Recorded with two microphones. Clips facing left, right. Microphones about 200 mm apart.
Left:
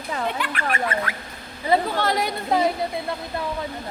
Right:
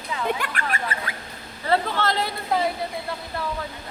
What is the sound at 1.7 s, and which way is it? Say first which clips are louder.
Speech: left 2 dB; 15° left (ahead or behind).